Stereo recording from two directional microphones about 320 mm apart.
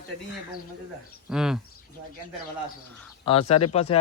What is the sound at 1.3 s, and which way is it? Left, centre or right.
Speech, centre.